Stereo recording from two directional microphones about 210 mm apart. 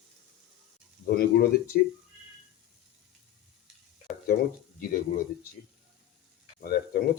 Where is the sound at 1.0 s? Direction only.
45° left (ahead or behind).